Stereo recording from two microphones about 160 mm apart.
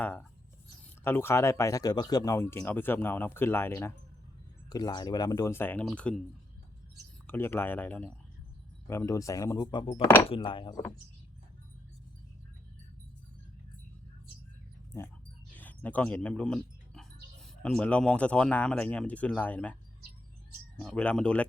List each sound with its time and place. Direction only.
0.0 s speech: 10° left (ahead or behind)
4.7 s speech: 25° left (ahead or behind); by 6.2 s 5° left (ahead or behind)
7.3 s speech: 15° left (ahead or behind)
15.5 s a sound: 10° left (ahead or behind)
17.6 s speech: 5° left (ahead or behind)
20.7 s speech: 5° left (ahead or behind)